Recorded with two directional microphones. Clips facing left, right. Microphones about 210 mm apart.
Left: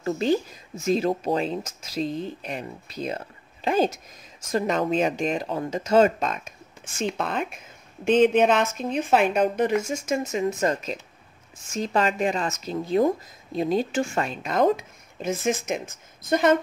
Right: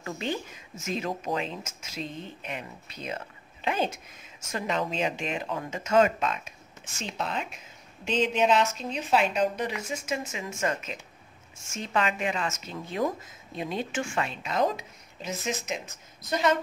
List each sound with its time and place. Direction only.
0.0 s speech: 35° left (ahead or behind)